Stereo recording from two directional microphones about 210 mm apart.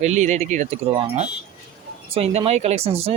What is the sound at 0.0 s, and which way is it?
Speech, 35° right (ahead or behind).